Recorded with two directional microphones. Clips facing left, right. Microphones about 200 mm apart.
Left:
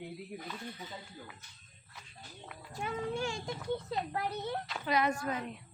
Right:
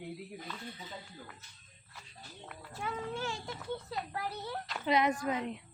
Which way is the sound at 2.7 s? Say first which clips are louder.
Left 3 dB; 15° left (ahead or behind).